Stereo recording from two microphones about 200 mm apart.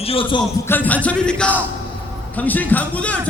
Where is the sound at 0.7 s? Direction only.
10° left (ahead or behind).